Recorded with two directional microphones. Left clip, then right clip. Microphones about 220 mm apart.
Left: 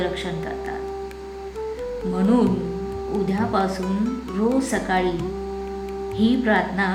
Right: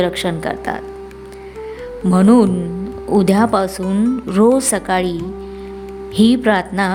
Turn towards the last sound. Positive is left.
turn(degrees=-50)  # may be behind; listen again after turning